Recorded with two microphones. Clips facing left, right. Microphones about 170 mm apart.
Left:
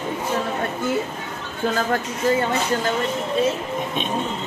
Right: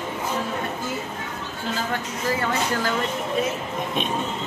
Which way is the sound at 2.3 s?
25° left (ahead or behind).